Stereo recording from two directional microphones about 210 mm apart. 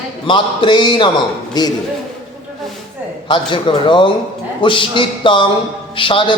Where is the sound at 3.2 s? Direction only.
20° left (ahead or behind).